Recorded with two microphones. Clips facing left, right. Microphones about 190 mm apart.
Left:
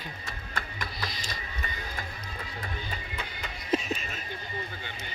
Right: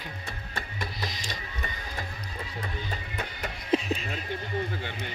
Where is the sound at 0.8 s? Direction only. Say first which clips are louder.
Right 4 dB; 15° right (ahead or behind).